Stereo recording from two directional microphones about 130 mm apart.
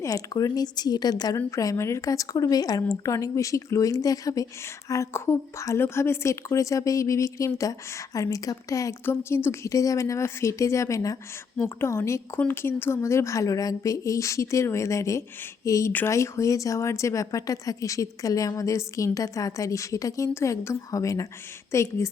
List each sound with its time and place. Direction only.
0.0 s a woman's voice: 25° left (ahead or behind)